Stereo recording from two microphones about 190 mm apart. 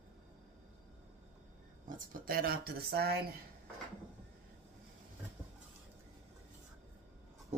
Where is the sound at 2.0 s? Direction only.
50° right (ahead or behind).